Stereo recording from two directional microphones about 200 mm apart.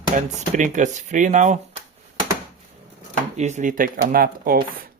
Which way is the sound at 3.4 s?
35° right (ahead or behind).